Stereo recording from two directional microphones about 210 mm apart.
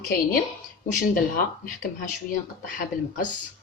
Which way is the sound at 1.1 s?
40° left (ahead or behind).